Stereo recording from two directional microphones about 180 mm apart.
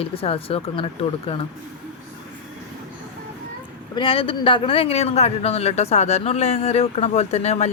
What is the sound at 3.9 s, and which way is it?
Speech, 30° left (ahead or behind).